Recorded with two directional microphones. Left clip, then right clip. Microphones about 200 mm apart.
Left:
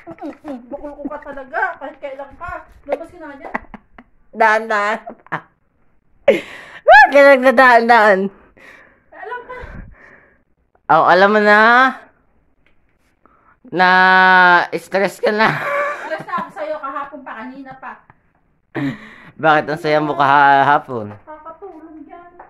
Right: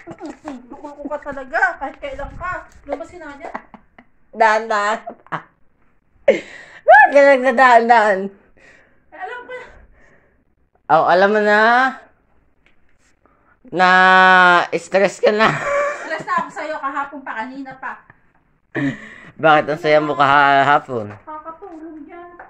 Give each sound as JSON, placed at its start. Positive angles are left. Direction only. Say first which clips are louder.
{"t": 0.7, "sound": "speech", "louder": "even", "side_deg": 30}
{"t": 1.5, "sound": "speech", "louder": "right 3 dB", "side_deg": 5}
{"t": 3.7, "sound": "a sound", "louder": "left 5 dB", "side_deg": 50}
{"t": 4.4, "sound": "speech", "louder": "left 1 dB", "side_deg": 20}
{"t": 6.2, "sound": "speech", "louder": "left 1 dB", "side_deg": 30}
{"t": 9.7, "sound": "gasp", "louder": "left 7 dB", "side_deg": 40}
{"t": 10.9, "sound": "speech", "louder": "left 2 dB", "side_deg": 30}
{"t": 13.7, "sound": "a woman's voice", "louder": "even", "side_deg": 10}